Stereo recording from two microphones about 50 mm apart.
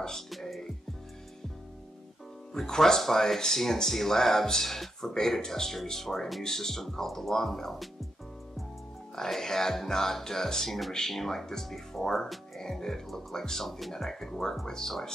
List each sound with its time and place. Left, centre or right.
0.3 s music: centre
2.5 s speech: centre
9.1 s speech: centre